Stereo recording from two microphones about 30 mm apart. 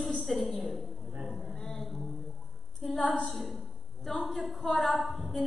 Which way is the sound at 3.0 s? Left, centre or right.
Left.